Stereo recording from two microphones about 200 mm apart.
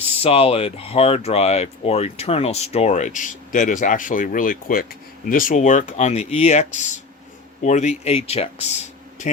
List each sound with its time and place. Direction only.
0.2 s speech: 30° left (ahead or behind)